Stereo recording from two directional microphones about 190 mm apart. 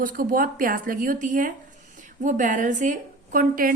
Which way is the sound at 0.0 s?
45° right (ahead or behind).